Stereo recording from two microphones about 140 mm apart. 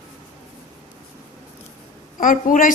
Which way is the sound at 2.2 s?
70° left (ahead or behind).